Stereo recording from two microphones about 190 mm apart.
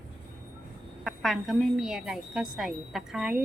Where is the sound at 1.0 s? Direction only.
Centre (ahead or behind).